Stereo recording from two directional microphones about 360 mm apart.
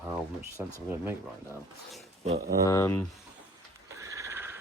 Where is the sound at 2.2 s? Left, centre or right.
Centre.